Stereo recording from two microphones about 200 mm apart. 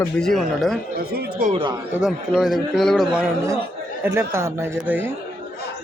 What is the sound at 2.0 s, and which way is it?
A man's voice, 5° right (ahead or behind).